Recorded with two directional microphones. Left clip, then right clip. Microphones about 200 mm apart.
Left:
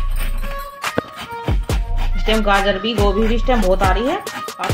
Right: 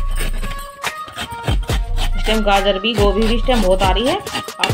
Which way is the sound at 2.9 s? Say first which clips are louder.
Right 1 dB; centre (ahead or behind).